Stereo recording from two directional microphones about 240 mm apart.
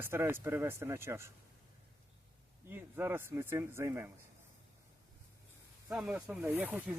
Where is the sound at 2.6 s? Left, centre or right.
Centre.